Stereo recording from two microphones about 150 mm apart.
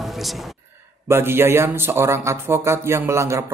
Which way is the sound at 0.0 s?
Centre (ahead or behind).